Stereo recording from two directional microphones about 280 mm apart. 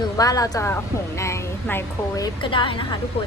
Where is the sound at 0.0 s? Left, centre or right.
Centre.